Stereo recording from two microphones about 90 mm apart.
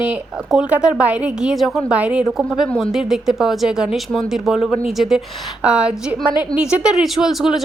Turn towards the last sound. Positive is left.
turn(degrees=-5)  # may be behind; listen again after turning